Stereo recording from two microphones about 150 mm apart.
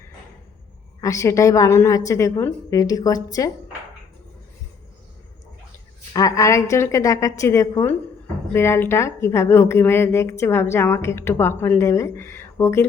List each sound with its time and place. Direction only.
1.0 s a woman's voice: 20° left (ahead or behind)
6.1 s a woman's voice: 20° left (ahead or behind)